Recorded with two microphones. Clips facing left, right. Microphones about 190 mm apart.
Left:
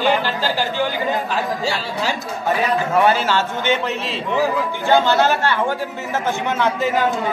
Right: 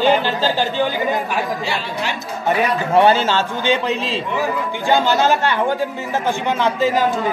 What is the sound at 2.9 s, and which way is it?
A man's voice, 30° right (ahead or behind).